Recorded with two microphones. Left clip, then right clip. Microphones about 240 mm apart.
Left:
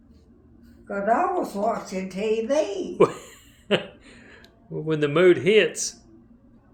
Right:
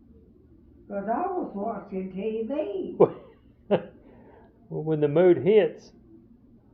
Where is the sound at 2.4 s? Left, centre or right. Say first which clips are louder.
Left 6 dB; left.